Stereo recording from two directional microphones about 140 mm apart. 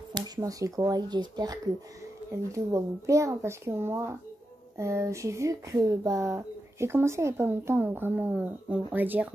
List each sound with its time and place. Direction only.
0.1 s speech: 25° right (ahead or behind)